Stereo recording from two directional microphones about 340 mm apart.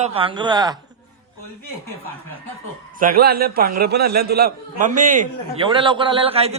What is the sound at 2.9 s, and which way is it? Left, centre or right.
A man's voice, right.